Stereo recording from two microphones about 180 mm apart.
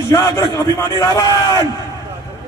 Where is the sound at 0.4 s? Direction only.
20° left (ahead or behind).